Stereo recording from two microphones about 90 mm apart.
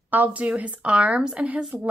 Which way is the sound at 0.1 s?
20° right (ahead or behind).